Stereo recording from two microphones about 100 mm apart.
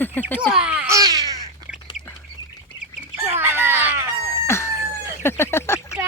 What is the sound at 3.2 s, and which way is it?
Bird, 20° right (ahead or behind).